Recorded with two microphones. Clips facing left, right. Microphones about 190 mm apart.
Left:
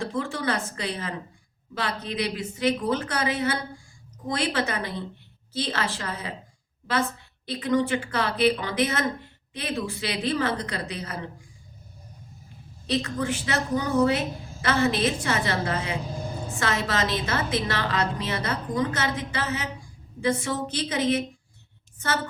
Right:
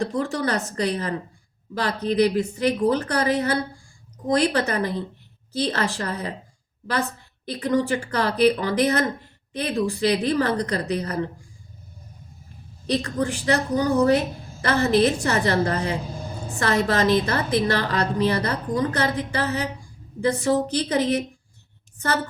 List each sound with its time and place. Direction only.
0.0 s a woman's voice: 40° right (ahead or behind)
7.4 s a woman's voice: 40° right (ahead or behind)
12.9 s a woman's voice: 45° right (ahead or behind)